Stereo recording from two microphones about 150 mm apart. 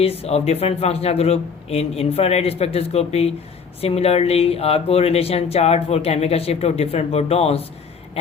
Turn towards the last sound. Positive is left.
turn(degrees=40)  # may be behind; listen again after turning